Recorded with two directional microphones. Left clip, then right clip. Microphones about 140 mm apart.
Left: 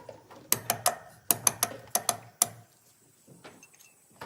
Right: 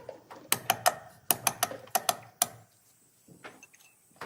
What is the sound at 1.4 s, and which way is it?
Typing, 10° right (ahead or behind).